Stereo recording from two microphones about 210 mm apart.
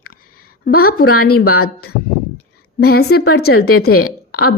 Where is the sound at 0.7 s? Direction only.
45° left (ahead or behind).